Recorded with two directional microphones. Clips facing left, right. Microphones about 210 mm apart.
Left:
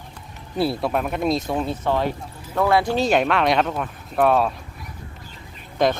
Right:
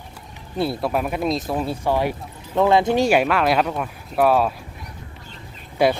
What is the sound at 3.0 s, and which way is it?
Speech, 5° right (ahead or behind).